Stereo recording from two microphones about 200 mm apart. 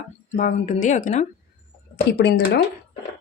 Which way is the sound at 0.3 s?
35° left (ahead or behind).